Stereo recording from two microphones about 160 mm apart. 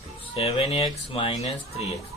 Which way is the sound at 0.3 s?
40° left (ahead or behind).